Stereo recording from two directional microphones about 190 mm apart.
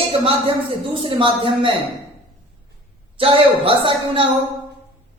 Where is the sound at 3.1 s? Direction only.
30° right (ahead or behind).